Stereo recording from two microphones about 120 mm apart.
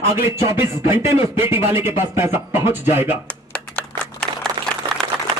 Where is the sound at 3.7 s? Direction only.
5° left (ahead or behind).